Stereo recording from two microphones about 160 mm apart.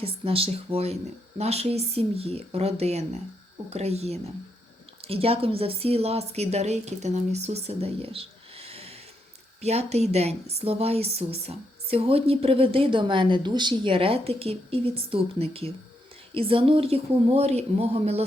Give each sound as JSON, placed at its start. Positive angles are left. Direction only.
{"t": 0.0, "sound": "speech", "side_deg": -35}